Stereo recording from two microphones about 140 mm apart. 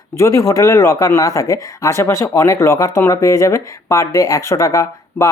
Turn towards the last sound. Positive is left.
turn(degrees=20)  # may be behind; listen again after turning